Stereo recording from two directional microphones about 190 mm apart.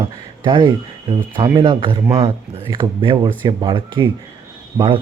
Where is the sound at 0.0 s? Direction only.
25° right (ahead or behind).